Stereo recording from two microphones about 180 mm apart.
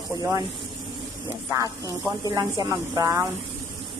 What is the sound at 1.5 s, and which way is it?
A woman's voice, 15° right (ahead or behind).